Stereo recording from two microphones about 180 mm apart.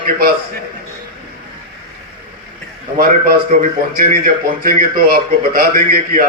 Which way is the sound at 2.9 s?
55° right (ahead or behind).